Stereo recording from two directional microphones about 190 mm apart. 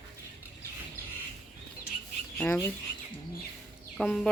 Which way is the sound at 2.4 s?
10° left (ahead or behind).